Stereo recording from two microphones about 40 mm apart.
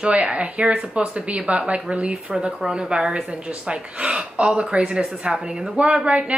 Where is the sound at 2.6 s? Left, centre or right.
Centre.